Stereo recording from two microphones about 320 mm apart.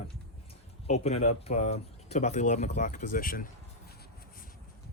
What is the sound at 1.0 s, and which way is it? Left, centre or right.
Speech, centre.